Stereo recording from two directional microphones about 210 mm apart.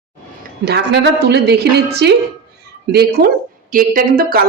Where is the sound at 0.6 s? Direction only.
50° right (ahead or behind).